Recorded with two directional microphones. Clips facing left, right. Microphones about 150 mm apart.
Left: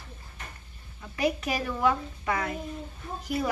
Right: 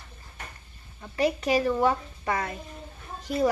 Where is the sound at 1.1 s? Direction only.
30° right (ahead or behind).